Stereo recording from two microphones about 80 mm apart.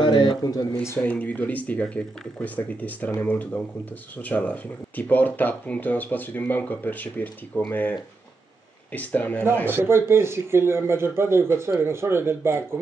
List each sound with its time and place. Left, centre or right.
0.0 s a sound: left
0.4 s speech: left
1.0 s speech: centre
8.9 s speech: left
9.7 s a man's voice: right